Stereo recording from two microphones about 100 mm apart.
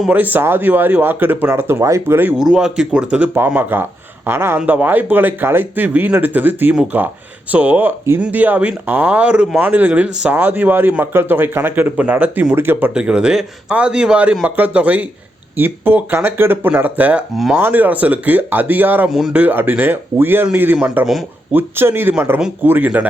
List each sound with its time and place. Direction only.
0.1 s speech: 15° right (ahead or behind)
2.4 s speech: 5° right (ahead or behind)
12.9 s speech: 10° right (ahead or behind)
17.3 s speech: centre (ahead or behind)
17.6 s speech: 20° right (ahead or behind)
19.0 s speech: 5° right (ahead or behind)
19.3 s speech: 15° right (ahead or behind)
21.0 s speech: centre (ahead or behind)
21.5 s speech: 20° right (ahead or behind)